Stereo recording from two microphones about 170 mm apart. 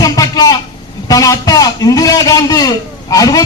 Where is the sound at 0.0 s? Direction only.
20° left (ahead or behind).